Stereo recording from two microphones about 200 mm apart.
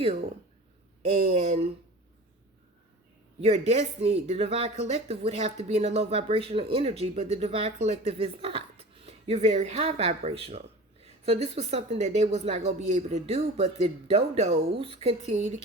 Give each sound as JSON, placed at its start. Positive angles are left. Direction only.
{"t": 1.1, "sound": "speech", "side_deg": -35}
{"t": 3.7, "sound": "speech", "side_deg": -30}